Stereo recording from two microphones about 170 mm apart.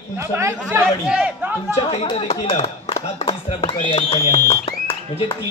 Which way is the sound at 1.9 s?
30° left (ahead or behind).